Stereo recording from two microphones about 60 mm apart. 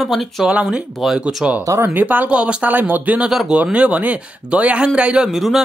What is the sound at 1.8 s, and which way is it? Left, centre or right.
Speech, right.